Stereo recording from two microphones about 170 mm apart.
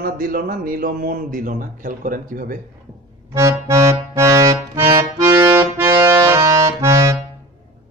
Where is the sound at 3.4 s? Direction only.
20° right (ahead or behind).